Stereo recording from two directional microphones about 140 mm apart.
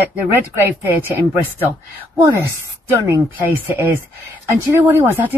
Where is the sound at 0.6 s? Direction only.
15° right (ahead or behind).